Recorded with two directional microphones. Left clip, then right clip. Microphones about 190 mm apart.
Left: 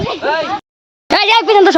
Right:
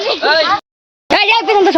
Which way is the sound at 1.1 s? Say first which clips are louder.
Left 1 dB; 10° left (ahead or behind).